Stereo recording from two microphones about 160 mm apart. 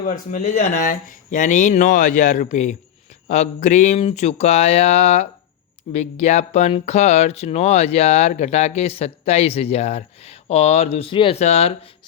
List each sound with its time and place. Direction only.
0.0 s speech: 50° left (ahead or behind); by 11.3 s 35° left (ahead or behind)
11.3 s speech: 45° left (ahead or behind)